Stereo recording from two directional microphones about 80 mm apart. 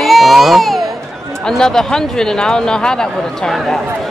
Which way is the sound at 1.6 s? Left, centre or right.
Centre.